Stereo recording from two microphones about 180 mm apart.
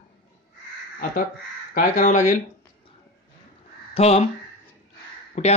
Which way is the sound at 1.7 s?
50° left (ahead or behind).